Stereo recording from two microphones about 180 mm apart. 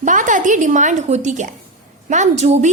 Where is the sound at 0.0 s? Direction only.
45° right (ahead or behind).